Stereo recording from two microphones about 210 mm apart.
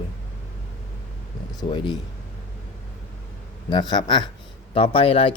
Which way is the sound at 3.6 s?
20° left (ahead or behind).